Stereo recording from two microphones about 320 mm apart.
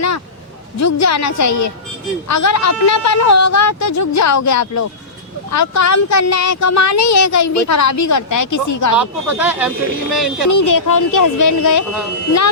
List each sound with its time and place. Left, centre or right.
0.8 s speech: left
9.0 s speech: centre
10.5 s speech: left